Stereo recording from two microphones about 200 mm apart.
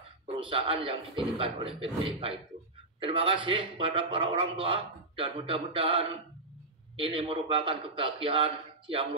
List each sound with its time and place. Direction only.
0.4 s speech: 25° right (ahead or behind)